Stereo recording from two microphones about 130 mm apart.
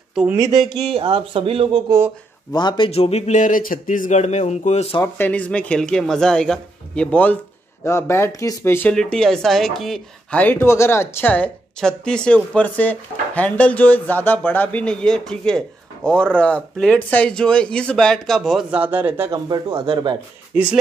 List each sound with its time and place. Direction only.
0.1 s speech: 5° right (ahead or behind)
0.4 s speech: 30° right (ahead or behind)
0.8 s speech: 45° right (ahead or behind)
1.9 s speech: 20° right (ahead or behind)
2.5 s speech: 35° left (ahead or behind)
2.9 s speech: 55° left (ahead or behind)
5.0 s speech: 15° left (ahead or behind)
8.9 s speech: 5° left (ahead or behind)
18.7 s speech: 15° right (ahead or behind)
19.3 s speech: 35° right (ahead or behind)
20.5 s speech: 10° right (ahead or behind)